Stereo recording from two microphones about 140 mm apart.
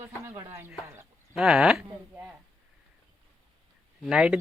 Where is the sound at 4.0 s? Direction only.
5° right (ahead or behind).